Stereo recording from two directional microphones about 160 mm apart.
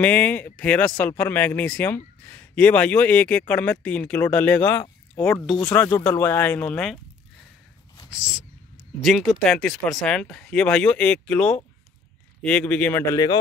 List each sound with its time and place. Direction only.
0.0 s a man's voice: 10° left (ahead or behind)
5.9 s a man's voice: 20° left (ahead or behind); by 7.0 s 5° left (ahead or behind)
8.1 s a man's voice: 5° right (ahead or behind)
13.1 s speech: 25° left (ahead or behind)